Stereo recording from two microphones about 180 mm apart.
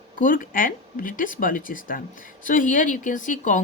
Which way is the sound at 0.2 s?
50° left (ahead or behind).